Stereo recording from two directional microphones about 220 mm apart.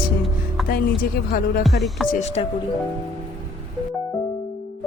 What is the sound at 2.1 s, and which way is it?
Music, 30° left (ahead or behind).